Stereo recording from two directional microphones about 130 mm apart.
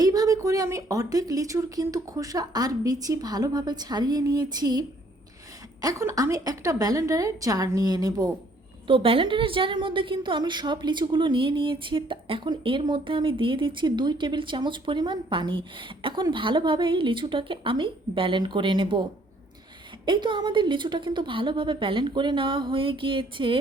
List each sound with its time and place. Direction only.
0.0 s speech: 30° right (ahead or behind)
8.9 s a woman's voice: 45° right (ahead or behind)
20.1 s a woman's voice: 35° right (ahead or behind)